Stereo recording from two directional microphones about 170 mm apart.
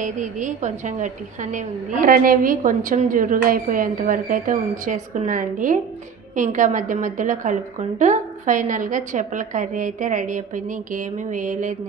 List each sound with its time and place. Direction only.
0.0 s a woman's voice: 45° right (ahead or behind)